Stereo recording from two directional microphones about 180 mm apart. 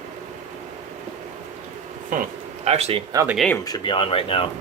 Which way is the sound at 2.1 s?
45° right (ahead or behind).